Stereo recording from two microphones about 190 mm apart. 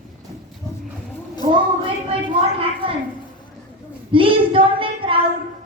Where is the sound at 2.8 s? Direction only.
30° right (ahead or behind).